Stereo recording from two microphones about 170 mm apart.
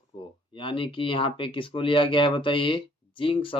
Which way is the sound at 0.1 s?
30° left (ahead or behind).